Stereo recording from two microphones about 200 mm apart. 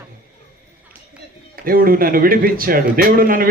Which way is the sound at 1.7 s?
45° right (ahead or behind).